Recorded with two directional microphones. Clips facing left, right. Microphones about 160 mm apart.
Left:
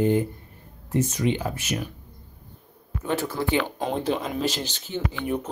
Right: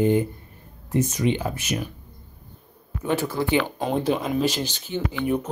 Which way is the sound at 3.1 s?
15° right (ahead or behind).